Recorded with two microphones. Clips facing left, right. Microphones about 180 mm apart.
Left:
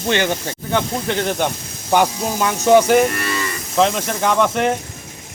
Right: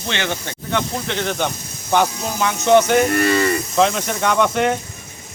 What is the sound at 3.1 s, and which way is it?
Speech, 40° right (ahead or behind).